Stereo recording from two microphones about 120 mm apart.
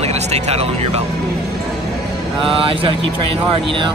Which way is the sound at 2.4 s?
50° right (ahead or behind).